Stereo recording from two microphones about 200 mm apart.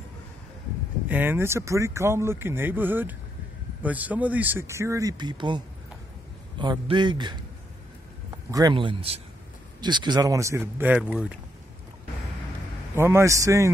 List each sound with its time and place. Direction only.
1.0 s speech: 10° right (ahead or behind)
6.6 s a man's voice: 20° right (ahead or behind)
8.5 s a man's voice: 20° right (ahead or behind)
12.9 s speech: 10° right (ahead or behind)